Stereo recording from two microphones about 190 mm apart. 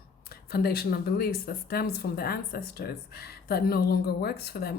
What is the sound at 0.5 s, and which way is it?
Speech, 55° left (ahead or behind).